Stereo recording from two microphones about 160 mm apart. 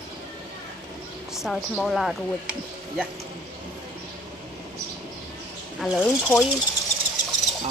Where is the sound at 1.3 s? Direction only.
Centre (ahead or behind).